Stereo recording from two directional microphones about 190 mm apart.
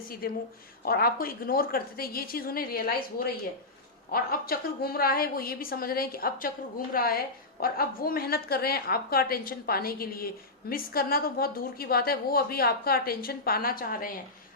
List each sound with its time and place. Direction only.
0.2 s a woman's voice: 50° left (ahead or behind)